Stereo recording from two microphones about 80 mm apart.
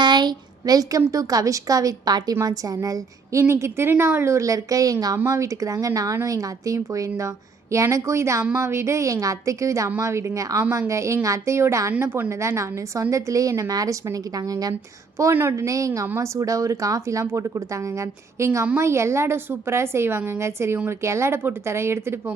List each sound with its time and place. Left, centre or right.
0.0 s a woman's voice: right
3.4 s a woman's voice: right
15.2 s a woman's voice: right
15.5 s speech: right